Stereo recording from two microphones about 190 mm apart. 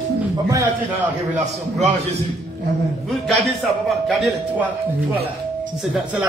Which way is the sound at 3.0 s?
Centre (ahead or behind).